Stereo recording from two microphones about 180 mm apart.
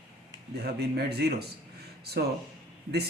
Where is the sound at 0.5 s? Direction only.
65° right (ahead or behind).